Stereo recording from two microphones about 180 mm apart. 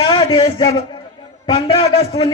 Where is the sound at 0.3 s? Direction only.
30° left (ahead or behind).